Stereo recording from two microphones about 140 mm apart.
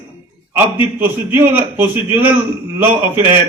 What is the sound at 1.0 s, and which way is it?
A man's voice, 15° right (ahead or behind).